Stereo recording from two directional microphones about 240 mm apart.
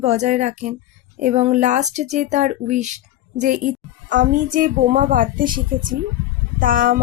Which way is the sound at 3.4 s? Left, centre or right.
Right.